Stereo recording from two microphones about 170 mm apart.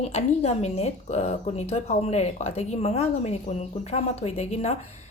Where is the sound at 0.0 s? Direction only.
40° left (ahead or behind).